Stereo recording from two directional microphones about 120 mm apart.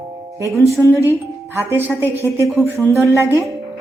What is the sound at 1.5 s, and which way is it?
Speech, 20° right (ahead or behind).